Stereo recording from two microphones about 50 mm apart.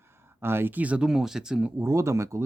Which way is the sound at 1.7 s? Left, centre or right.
Right.